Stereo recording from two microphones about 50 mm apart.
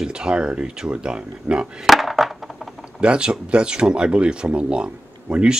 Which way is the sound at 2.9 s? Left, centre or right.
Right.